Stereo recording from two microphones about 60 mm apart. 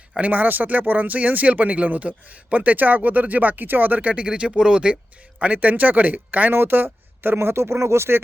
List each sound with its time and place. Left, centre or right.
0.2 s speech: right
5.4 s speech: right